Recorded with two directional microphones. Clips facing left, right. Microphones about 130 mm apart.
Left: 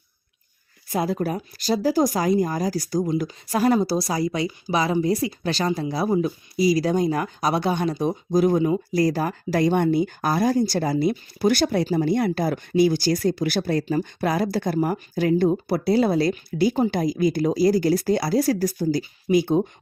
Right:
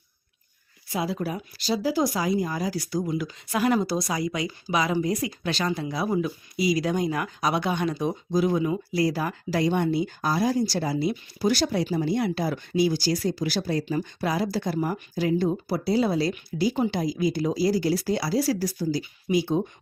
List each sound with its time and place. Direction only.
0.9 s speech: 45° left (ahead or behind)
8.0 s speech: 45° left (ahead or behind)
15.1 s speech: 55° left (ahead or behind)